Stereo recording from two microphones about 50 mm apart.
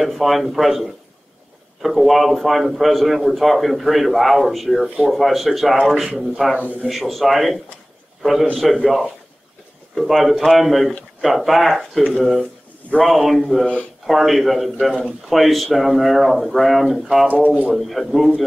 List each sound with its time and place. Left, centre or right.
0.0 s a man's voice: centre